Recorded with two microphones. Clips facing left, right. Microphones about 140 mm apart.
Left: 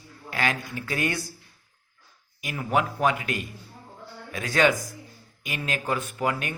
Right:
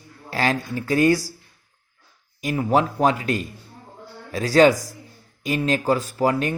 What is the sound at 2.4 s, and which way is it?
Speech, 35° right (ahead or behind).